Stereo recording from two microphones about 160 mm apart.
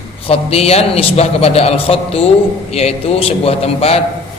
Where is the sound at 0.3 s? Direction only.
40° left (ahead or behind).